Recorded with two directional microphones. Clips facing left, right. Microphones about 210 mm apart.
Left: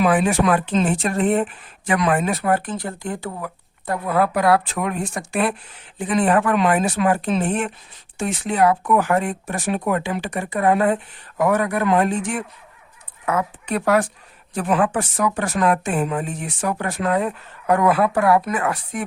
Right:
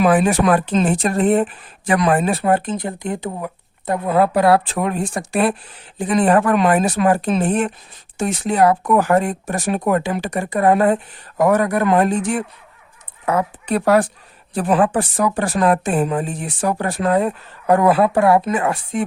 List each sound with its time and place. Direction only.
0.0 s speech: 40° right (ahead or behind)